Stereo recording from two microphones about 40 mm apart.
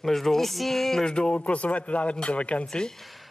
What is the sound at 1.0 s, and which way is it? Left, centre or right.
Speech, left.